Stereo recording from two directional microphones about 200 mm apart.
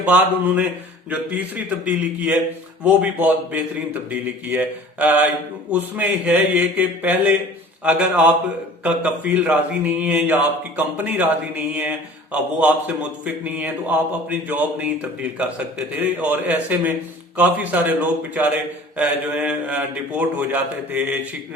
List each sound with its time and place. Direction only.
0.0 s a man's voice: 5° right (ahead or behind)
16.0 s speech: 5° right (ahead or behind)